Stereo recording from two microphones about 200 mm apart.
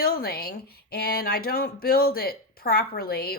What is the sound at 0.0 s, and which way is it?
Speech, 50° left (ahead or behind).